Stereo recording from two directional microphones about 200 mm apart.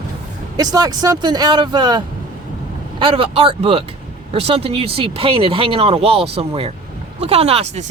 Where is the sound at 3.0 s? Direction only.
25° right (ahead or behind).